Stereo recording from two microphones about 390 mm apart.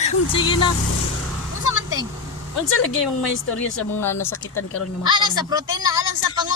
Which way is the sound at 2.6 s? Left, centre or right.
Left.